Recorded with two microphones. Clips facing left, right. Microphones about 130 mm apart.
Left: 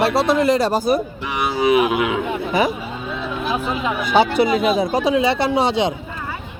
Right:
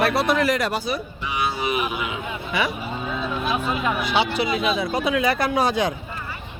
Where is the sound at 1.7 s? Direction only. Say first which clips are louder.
Left 9 dB; 90° left.